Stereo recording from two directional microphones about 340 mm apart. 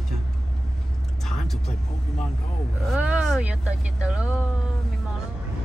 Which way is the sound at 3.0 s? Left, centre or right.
Centre.